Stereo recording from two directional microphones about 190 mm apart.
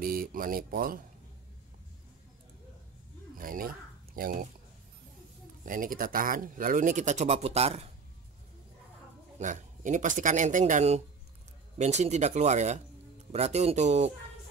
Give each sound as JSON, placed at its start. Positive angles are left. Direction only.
{"t": 0.0, "sound": "speech", "side_deg": -50}
{"t": 3.3, "sound": "speech", "side_deg": -50}
{"t": 5.7, "sound": "speech", "side_deg": -45}
{"t": 9.4, "sound": "speech", "side_deg": -40}